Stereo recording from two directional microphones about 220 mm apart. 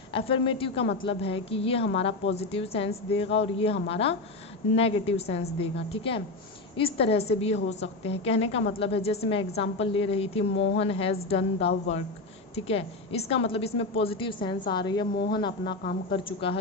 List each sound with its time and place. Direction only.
0.1 s a woman's voice: 25° left (ahead or behind)
15.8 s speech: 35° left (ahead or behind)
16.1 s a woman's voice: 25° left (ahead or behind)